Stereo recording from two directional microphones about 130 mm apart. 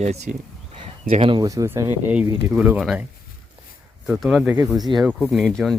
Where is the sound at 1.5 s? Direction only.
20° right (ahead or behind).